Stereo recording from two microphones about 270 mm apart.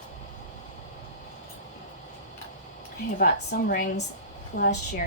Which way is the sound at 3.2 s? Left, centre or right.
Left.